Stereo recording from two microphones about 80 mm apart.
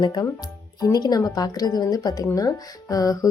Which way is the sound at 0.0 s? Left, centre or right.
Left.